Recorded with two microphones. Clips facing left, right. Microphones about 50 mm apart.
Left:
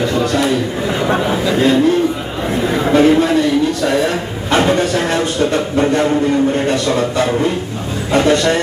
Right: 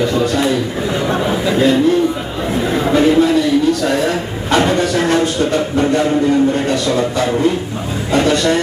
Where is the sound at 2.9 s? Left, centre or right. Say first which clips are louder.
Left 1 dB; left.